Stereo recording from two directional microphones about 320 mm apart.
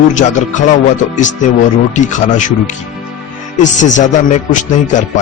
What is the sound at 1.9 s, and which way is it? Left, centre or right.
Speech, left.